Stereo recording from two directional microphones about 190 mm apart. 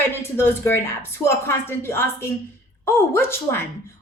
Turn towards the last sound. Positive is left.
turn(degrees=15)  # may be behind; listen again after turning